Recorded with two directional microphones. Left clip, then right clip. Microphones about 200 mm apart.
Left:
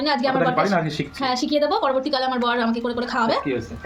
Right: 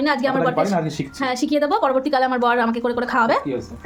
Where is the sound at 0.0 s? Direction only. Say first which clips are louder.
Right 1 dB; 15° right (ahead or behind).